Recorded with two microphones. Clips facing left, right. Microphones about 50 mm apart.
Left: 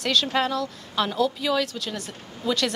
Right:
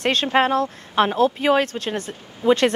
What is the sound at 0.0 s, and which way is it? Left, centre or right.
Speech, right.